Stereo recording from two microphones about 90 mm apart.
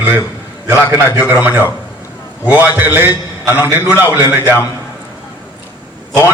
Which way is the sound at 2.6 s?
20° right (ahead or behind).